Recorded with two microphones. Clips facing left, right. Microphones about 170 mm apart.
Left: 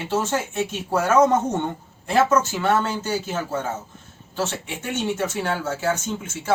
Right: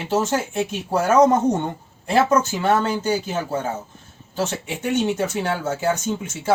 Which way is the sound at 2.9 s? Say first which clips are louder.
Right 3 dB; 10° right (ahead or behind).